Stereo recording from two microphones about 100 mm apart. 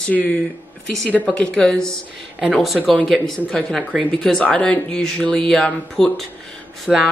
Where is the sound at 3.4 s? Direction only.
10° left (ahead or behind).